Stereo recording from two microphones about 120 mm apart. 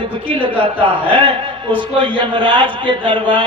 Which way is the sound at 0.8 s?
45° right (ahead or behind).